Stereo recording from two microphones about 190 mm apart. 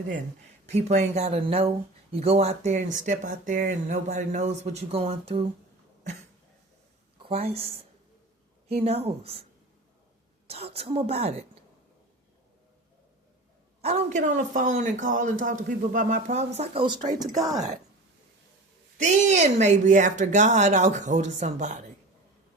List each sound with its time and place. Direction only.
0.7 s speech: 35° right (ahead or behind)
7.2 s speech: 30° right (ahead or behind)
13.8 s speech: 35° right (ahead or behind)
17.2 s speech: 20° right (ahead or behind)
18.9 s speech: 40° right (ahead or behind)